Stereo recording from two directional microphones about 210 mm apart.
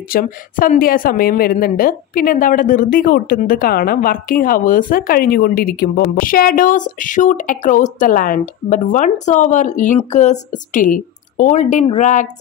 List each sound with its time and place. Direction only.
0.1 s speech: 40° left (ahead or behind)